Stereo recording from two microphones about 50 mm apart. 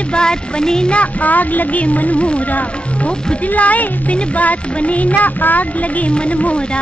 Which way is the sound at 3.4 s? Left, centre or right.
Left.